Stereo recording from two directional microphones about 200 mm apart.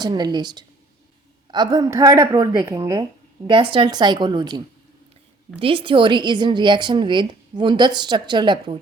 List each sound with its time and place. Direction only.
0.0 s a woman's voice: 20° right (ahead or behind)